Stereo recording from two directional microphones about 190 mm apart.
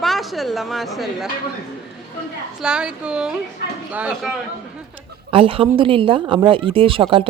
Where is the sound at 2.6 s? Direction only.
5° right (ahead or behind).